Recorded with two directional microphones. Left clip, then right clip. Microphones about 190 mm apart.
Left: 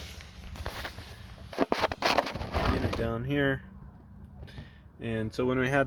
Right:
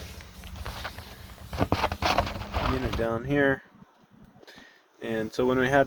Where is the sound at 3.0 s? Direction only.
5° left (ahead or behind).